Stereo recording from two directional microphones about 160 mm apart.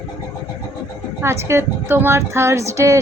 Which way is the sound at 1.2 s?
15° right (ahead or behind).